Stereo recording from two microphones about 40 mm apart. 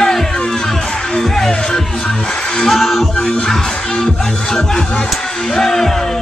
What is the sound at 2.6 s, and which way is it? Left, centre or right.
Music, centre.